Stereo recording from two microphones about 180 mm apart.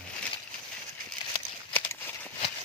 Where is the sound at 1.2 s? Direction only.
30° left (ahead or behind).